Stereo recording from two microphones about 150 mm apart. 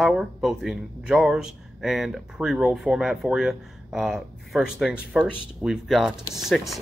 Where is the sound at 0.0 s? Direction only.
Centre (ahead or behind).